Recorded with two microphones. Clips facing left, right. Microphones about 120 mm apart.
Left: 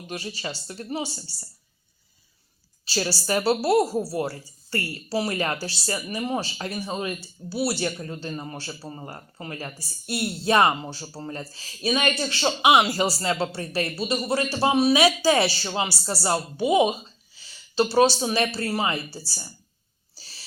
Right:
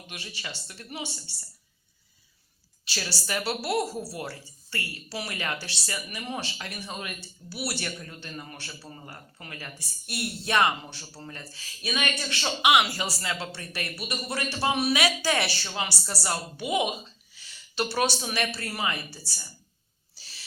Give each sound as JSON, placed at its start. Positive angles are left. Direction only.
{"t": 0.1, "sound": "a man's voice", "side_deg": 35}
{"t": 2.8, "sound": "a man's voice", "side_deg": 35}
{"t": 20.1, "sound": "a sound", "side_deg": 35}